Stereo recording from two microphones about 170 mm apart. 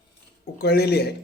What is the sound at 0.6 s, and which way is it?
Speech, 70° left (ahead or behind).